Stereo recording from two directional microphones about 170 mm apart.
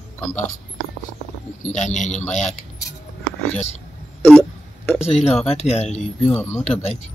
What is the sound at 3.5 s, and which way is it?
Speech, 40° left (ahead or behind).